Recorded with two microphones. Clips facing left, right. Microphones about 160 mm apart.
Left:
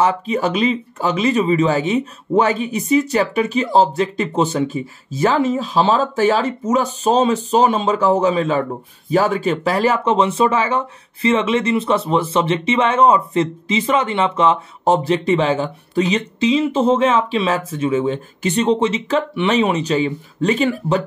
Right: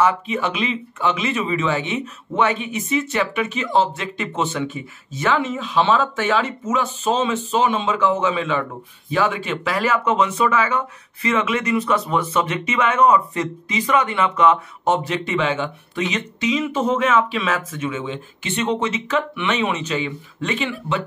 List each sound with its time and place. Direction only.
0.0 s speech: 35° left (ahead or behind)